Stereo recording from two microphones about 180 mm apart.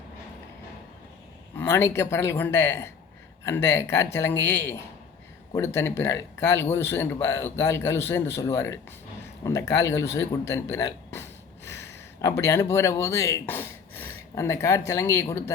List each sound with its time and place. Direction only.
1.5 s a man's voice: 15° left (ahead or behind)